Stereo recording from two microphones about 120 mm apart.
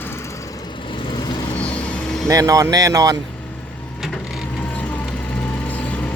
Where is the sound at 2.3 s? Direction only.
30° right (ahead or behind).